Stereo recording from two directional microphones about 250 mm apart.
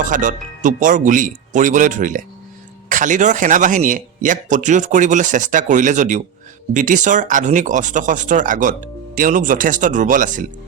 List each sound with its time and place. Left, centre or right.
0.0 s speech: right